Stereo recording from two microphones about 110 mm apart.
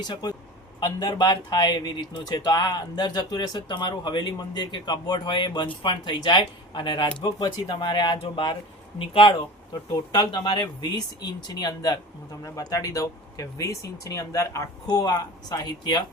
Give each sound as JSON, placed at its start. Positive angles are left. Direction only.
{"t": 0.0, "sound": "speech", "side_deg": 40}
{"t": 9.9, "sound": "speech", "side_deg": 40}